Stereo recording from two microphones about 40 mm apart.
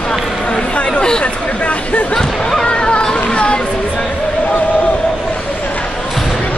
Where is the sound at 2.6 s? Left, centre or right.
Left.